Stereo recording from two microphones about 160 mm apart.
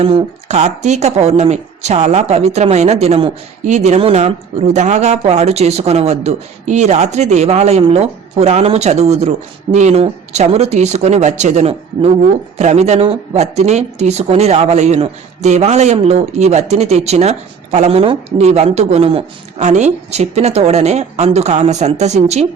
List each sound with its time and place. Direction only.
0.0 s speech: 35° right (ahead or behind)